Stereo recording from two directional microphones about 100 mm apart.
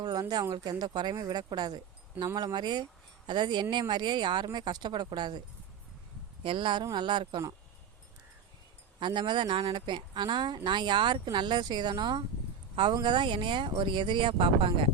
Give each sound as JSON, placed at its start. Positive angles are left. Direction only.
{"t": 0.0, "sound": "speech", "side_deg": -40}
{"t": 6.4, "sound": "speech", "side_deg": -55}
{"t": 9.0, "sound": "speech", "side_deg": -50}